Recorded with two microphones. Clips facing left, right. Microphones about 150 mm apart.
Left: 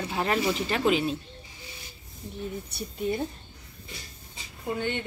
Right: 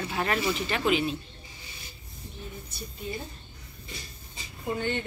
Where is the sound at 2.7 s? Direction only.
65° left (ahead or behind).